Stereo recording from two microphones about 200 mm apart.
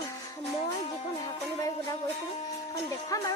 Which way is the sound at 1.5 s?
15° left (ahead or behind).